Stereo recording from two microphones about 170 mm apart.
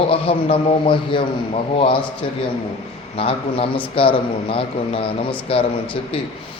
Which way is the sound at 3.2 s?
35° left (ahead or behind).